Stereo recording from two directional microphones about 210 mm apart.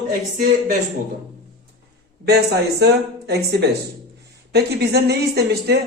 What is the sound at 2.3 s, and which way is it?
A woman's voice, 50° right (ahead or behind).